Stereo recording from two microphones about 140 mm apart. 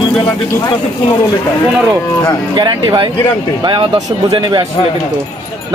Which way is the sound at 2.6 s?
30° right (ahead or behind).